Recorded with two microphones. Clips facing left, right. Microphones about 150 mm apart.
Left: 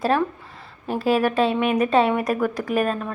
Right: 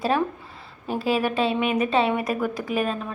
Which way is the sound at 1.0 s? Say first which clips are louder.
Left 4 dB; 40° left (ahead or behind).